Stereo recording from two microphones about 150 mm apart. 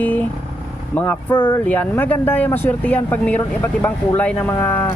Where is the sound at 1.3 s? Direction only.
30° left (ahead or behind).